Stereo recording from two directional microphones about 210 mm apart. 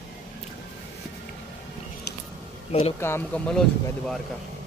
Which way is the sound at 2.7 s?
30° left (ahead or behind).